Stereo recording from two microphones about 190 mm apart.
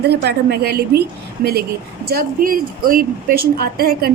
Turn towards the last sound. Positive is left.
turn(degrees=-50)  # may be behind; listen again after turning